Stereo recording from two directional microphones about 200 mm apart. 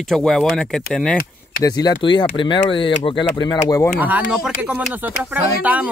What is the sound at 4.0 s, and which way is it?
Speech, 5° right (ahead or behind).